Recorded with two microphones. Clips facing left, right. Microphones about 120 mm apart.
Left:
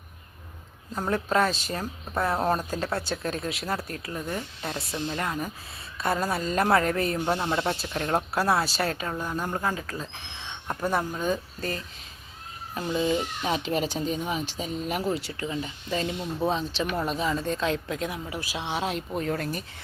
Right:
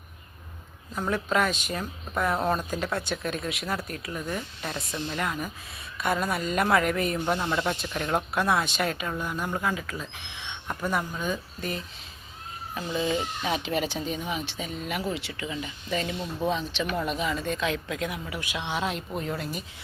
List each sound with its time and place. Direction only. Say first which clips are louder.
0.9 s speech: left 1 dB; 35° left (ahead or behind)
10.0 s a sound: left 1 dB; 40° left (ahead or behind)
12.7 s speech: left 2 dB; 40° left (ahead or behind)